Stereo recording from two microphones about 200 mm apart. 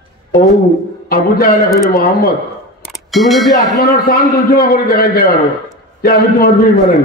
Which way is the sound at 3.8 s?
50° left (ahead or behind).